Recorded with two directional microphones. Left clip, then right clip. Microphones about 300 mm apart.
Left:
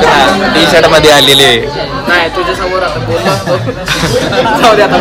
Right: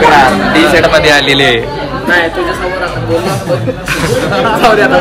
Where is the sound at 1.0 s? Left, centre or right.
Centre.